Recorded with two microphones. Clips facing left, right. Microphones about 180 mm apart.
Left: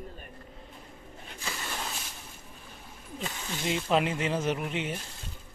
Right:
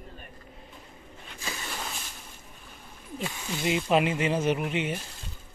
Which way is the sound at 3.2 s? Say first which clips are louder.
Right 3 dB; 10° right (ahead or behind).